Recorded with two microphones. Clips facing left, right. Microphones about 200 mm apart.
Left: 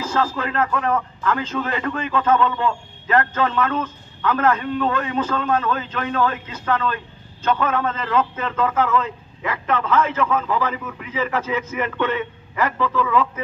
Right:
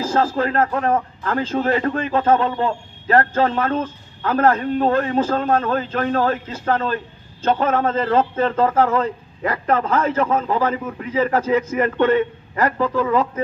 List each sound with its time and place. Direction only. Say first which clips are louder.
0.0 s a man's voice: right 4 dB; 40° right (ahead or behind)